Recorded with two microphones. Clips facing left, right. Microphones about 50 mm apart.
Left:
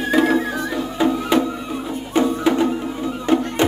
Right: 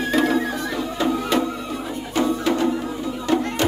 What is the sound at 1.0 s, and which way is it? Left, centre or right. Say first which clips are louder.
Music: left 3 dB; left.